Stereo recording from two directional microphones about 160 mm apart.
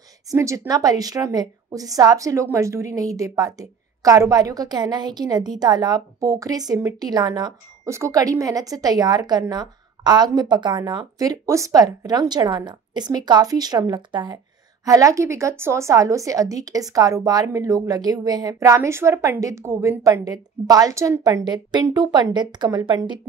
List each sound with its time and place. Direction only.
0.3 s a woman's voice: 20° right (ahead or behind)